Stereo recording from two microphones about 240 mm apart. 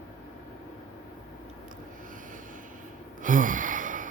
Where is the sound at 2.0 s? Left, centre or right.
Right.